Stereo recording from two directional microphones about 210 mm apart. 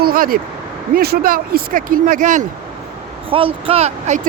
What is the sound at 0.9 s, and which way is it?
Speech, 45° right (ahead or behind).